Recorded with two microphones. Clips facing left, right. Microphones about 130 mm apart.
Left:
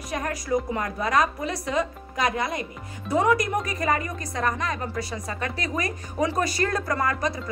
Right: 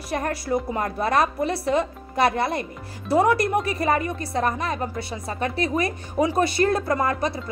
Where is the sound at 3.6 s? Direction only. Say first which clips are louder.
Right 3 dB; 30° right (ahead or behind).